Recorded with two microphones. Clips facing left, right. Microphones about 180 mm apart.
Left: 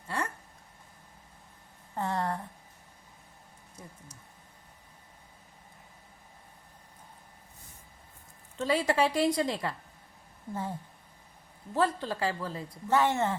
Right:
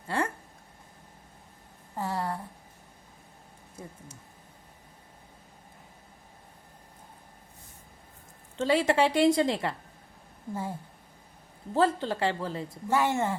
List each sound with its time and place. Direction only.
2.0 s a sound: 5° right (ahead or behind)
8.5 s a woman's voice: 25° right (ahead or behind)
10.5 s a woman's voice: 10° right (ahead or behind)
11.7 s a woman's voice: 30° right (ahead or behind)
12.9 s a woman's voice: 10° right (ahead or behind)